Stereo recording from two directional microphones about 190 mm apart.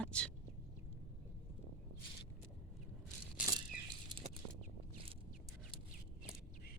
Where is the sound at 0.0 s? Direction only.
5° left (ahead or behind).